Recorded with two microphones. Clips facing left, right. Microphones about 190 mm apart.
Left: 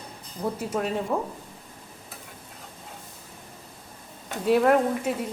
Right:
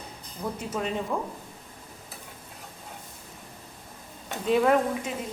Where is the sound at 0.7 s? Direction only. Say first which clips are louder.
Left 1 dB; 5° left (ahead or behind).